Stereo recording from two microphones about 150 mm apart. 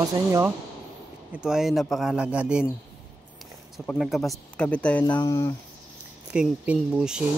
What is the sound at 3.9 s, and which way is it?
Speech, 5° left (ahead or behind).